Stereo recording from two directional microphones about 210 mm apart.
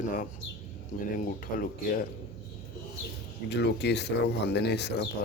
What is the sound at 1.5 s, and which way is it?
Speech, 40° left (ahead or behind).